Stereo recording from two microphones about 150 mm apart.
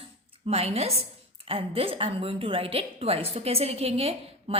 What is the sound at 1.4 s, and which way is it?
A woman's voice, 40° right (ahead or behind).